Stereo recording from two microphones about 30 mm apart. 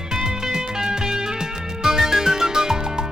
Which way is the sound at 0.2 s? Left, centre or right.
Right.